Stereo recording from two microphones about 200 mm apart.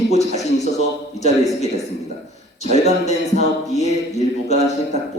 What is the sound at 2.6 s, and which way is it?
Speech, 35° left (ahead or behind).